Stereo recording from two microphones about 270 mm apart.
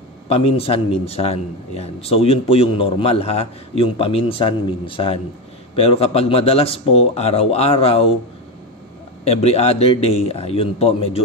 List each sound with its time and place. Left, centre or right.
0.3 s a man's voice: left
9.2 s a man's voice: left